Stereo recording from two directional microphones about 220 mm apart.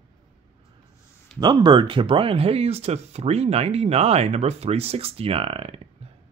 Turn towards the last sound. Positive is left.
turn(degrees=-25)  # may be behind; listen again after turning